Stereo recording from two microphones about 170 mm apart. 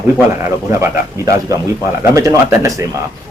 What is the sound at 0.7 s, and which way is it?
Speech, 20° right (ahead or behind).